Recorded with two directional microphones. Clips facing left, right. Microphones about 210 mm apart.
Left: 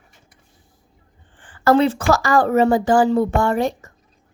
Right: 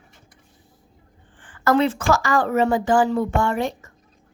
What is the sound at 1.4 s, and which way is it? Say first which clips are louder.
A woman's voice: left 3 dB; 30° left (ahead or behind).